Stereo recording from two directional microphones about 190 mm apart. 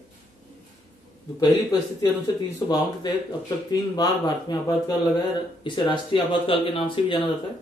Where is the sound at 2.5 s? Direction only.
20° left (ahead or behind).